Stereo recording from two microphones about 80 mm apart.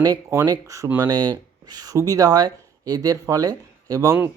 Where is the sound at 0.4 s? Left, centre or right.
Right.